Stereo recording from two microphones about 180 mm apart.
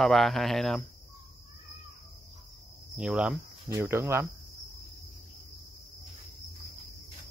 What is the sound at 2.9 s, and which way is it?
Speech, 5° right (ahead or behind).